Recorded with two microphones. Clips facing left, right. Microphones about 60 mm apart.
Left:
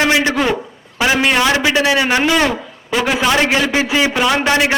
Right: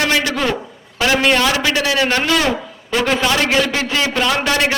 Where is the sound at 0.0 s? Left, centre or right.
Centre.